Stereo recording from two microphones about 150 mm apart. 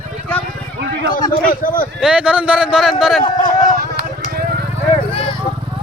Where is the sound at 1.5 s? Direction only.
65° left (ahead or behind).